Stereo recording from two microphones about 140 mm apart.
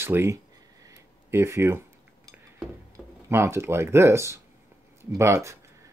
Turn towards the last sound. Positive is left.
turn(degrees=-20)  # may be behind; listen again after turning